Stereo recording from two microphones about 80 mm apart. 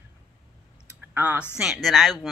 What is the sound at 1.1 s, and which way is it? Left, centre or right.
Speech, centre.